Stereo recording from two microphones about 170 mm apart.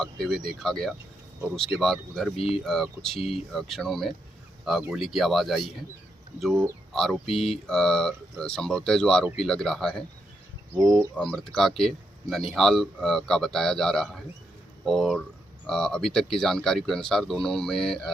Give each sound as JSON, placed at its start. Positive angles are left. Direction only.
{"t": 0.0, "sound": "speech", "side_deg": 0}
{"t": 2.3, "sound": "speech", "side_deg": 35}
{"t": 2.6, "sound": "speech", "side_deg": 5}
{"t": 11.2, "sound": "speech", "side_deg": 5}